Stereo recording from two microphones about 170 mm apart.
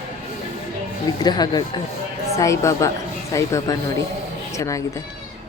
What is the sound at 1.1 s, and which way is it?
Speech, 25° left (ahead or behind).